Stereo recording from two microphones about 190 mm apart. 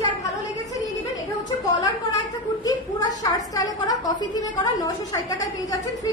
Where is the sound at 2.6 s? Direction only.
20° left (ahead or behind).